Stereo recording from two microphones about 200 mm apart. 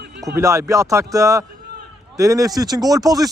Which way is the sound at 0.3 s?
15° right (ahead or behind).